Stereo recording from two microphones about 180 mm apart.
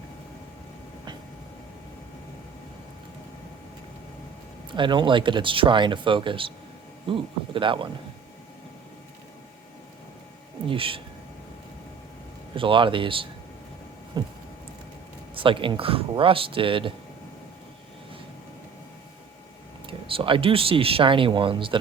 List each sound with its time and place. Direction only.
4.7 s speech: 25° right (ahead or behind)
10.7 s speech: 30° right (ahead or behind)
12.5 s speech: 30° right (ahead or behind)
15.4 s speech: 30° right (ahead or behind)
19.9 s speech: 30° right (ahead or behind)